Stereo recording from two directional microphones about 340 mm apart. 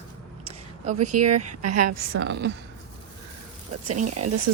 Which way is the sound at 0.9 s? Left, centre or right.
Right.